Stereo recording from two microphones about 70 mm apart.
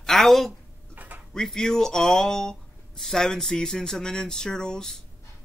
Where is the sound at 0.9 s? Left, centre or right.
Right.